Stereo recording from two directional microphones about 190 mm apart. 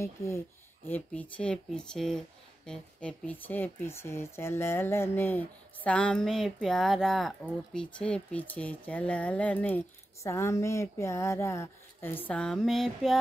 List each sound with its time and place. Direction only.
0.0 s speech: 15° left (ahead or behind)